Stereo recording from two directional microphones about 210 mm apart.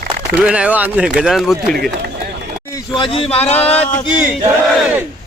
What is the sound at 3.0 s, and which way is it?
Speech, 25° left (ahead or behind).